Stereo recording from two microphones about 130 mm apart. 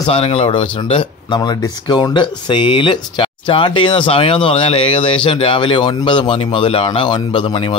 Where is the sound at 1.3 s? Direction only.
30° left (ahead or behind).